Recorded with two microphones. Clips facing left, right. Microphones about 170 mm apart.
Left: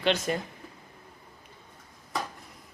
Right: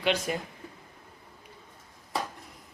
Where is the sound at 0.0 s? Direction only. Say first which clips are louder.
Left 1 dB; 5° right (ahead or behind).